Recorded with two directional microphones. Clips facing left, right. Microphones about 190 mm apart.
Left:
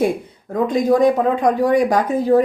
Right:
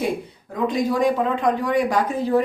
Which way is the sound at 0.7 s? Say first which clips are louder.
Left 6 dB; 45° left (ahead or behind).